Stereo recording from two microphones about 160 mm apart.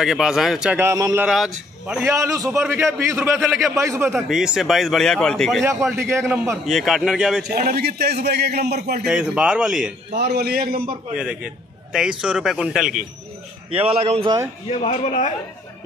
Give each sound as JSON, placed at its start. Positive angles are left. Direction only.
{"t": 0.0, "sound": "a man's voice", "side_deg": -5}
{"t": 2.1, "sound": "a man's voice", "side_deg": -20}
{"t": 4.3, "sound": "a man's voice", "side_deg": 0}
{"t": 5.9, "sound": "a man's voice", "side_deg": -15}
{"t": 6.6, "sound": "a man's voice", "side_deg": 0}
{"t": 7.4, "sound": "speech", "side_deg": -50}
{"t": 7.7, "sound": "a man's voice", "side_deg": -90}
{"t": 9.0, "sound": "a man's voice", "side_deg": -5}
{"t": 10.1, "sound": "a man's voice", "side_deg": -90}
{"t": 11.1, "sound": "a man's voice", "side_deg": -5}
{"t": 13.7, "sound": "a man's voice", "side_deg": -35}
{"t": 14.7, "sound": "a man's voice", "side_deg": 40}